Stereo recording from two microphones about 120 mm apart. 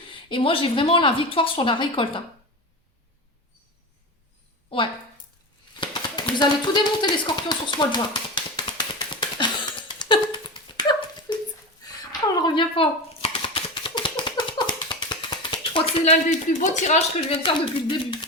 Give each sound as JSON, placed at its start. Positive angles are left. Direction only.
{"t": 0.1, "sound": "a woman's voice", "side_deg": 45}
{"t": 5.8, "sound": "a sound", "side_deg": 40}
{"t": 16.5, "sound": "speech", "side_deg": 85}
{"t": 17.2, "sound": "a woman's voice", "side_deg": 50}